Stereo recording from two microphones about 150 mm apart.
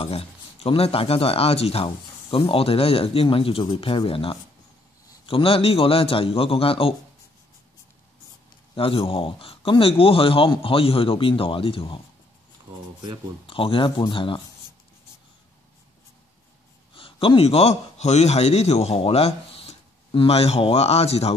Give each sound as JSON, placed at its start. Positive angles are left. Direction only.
{"t": 0.0, "sound": "a man's voice", "side_deg": 40}
{"t": 8.7, "sound": "a man's voice", "side_deg": 40}
{"t": 13.5, "sound": "a man's voice", "side_deg": 35}
{"t": 16.9, "sound": "a man's voice", "side_deg": 35}